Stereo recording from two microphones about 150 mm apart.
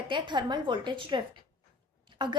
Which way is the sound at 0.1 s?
30° right (ahead or behind).